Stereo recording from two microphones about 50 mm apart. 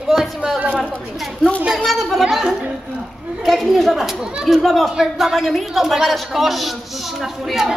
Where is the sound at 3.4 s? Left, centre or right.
Centre.